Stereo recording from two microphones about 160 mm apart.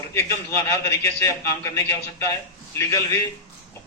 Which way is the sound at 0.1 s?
15° left (ahead or behind).